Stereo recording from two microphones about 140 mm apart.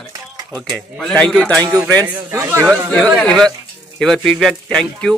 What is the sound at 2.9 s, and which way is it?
A man's voice, 10° left (ahead or behind).